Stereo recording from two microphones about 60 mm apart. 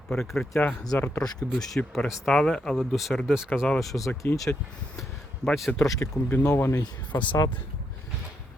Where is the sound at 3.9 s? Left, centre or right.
Left.